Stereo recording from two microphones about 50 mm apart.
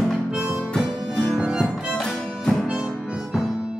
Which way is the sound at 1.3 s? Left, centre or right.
Centre.